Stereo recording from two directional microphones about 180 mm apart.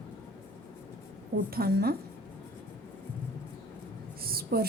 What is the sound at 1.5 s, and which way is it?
Speech, 60° right (ahead or behind).